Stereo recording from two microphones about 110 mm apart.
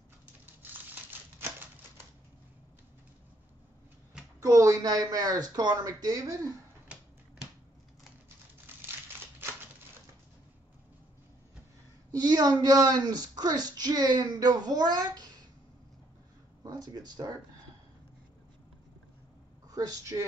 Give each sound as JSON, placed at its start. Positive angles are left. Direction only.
{"t": 0.5, "sound": "crumpling", "side_deg": -15}
{"t": 4.4, "sound": "speech", "side_deg": -30}
{"t": 8.7, "sound": "crumpling", "side_deg": -20}
{"t": 12.1, "sound": "speech", "side_deg": -35}
{"t": 16.6, "sound": "speech", "side_deg": -35}
{"t": 19.7, "sound": "speech", "side_deg": -35}